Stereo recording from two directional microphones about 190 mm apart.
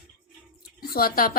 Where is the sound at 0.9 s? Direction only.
50° left (ahead or behind).